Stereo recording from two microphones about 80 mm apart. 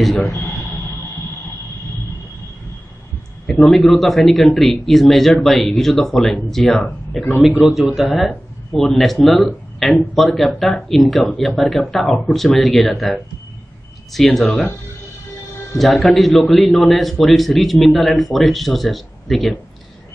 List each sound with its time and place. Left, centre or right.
0.0 s a man's voice: centre
3.4 s a man's voice: centre
14.1 s a man's voice: centre
15.8 s a man's voice: centre